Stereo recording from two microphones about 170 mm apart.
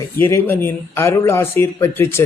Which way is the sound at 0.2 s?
15° left (ahead or behind).